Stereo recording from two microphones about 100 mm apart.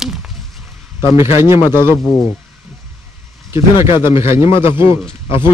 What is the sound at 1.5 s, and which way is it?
Speech, 40° left (ahead or behind).